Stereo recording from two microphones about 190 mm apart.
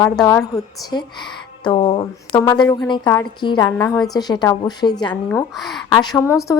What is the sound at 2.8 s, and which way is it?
A woman's voice, 25° left (ahead or behind).